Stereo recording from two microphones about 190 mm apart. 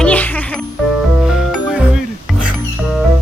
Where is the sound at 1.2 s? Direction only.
5° right (ahead or behind).